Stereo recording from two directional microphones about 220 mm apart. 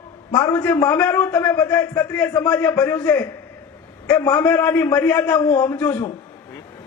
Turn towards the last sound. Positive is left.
turn(degrees=5)  # may be behind; listen again after turning